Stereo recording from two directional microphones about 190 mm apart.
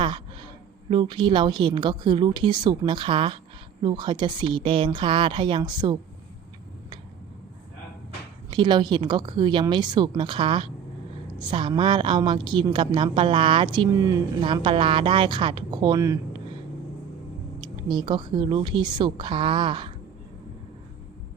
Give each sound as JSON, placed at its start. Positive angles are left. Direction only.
{"t": 0.9, "sound": "a woman's voice", "side_deg": -25}
{"t": 8.4, "sound": "a woman's voice", "side_deg": -25}
{"t": 17.6, "sound": "a woman's voice", "side_deg": -25}